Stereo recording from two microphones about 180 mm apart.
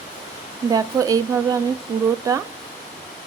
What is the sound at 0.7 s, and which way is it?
Speech, 20° right (ahead or behind).